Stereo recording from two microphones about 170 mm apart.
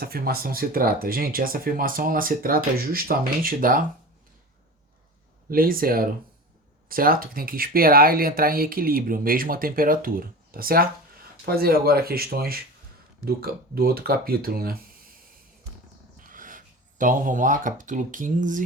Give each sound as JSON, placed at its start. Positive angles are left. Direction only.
{"t": 0.0, "sound": "speech", "side_deg": -60}
{"t": 5.5, "sound": "speech", "side_deg": -60}
{"t": 16.2, "sound": "speech", "side_deg": -50}